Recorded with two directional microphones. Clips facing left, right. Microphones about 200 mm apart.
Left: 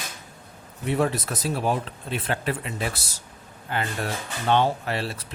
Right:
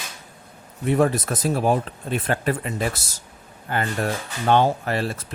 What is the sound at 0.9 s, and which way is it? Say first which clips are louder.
Speech: right 4 dB; 50° right (ahead or behind).